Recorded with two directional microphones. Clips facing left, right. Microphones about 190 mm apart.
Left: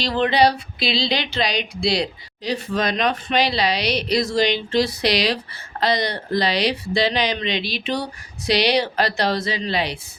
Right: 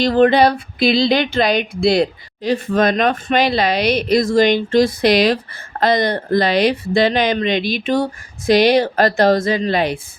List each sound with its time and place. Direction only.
0.0 s speech: 50° right (ahead or behind)